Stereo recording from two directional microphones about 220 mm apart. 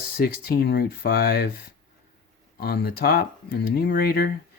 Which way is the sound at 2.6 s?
45° left (ahead or behind).